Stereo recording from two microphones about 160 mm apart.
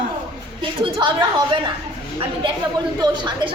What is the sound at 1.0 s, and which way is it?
Speech, 30° right (ahead or behind).